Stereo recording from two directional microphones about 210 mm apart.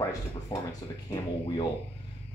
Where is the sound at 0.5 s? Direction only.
20° left (ahead or behind).